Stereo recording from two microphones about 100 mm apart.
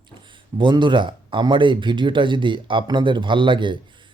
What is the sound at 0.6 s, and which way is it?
Speech, 50° right (ahead or behind).